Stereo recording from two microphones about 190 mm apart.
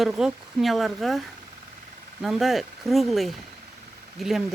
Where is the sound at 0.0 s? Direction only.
5° right (ahead or behind).